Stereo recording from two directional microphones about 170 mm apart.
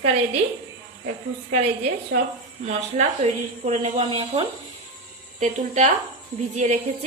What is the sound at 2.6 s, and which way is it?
A woman's voice, 45° right (ahead or behind).